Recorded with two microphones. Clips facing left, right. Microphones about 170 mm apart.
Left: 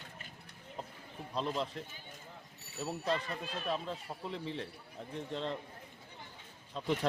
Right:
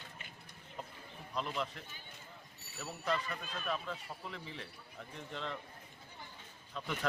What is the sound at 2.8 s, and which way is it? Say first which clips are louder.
Speech: left 3 dB; 30° left (ahead or behind).